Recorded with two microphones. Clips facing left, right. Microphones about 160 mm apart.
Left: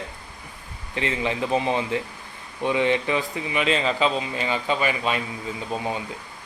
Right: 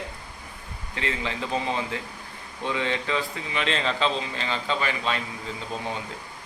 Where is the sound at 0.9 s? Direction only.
20° left (ahead or behind).